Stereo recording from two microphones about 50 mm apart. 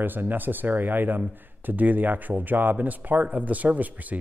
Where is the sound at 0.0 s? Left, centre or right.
Right.